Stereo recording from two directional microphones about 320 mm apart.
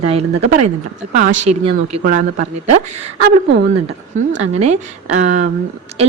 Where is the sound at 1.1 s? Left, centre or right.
Right.